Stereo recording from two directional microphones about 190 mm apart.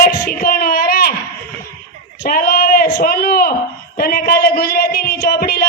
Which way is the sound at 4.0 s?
50° left (ahead or behind).